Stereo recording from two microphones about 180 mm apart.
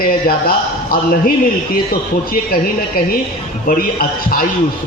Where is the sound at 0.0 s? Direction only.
55° left (ahead or behind).